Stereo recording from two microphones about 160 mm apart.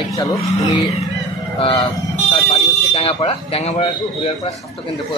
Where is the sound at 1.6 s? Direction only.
35° left (ahead or behind).